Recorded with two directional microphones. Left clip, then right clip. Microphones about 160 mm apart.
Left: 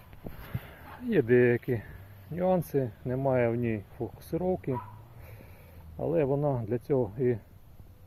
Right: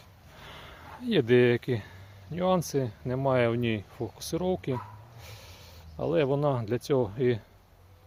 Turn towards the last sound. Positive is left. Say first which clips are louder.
# right 2 dB
turn(degrees=-20)  # may be behind; listen again after turning